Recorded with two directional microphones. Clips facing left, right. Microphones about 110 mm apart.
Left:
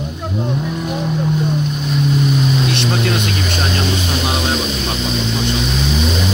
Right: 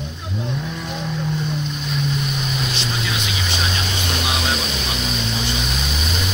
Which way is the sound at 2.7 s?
60° left (ahead or behind).